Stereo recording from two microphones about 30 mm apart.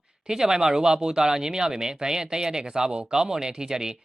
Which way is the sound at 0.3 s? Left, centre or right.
Right.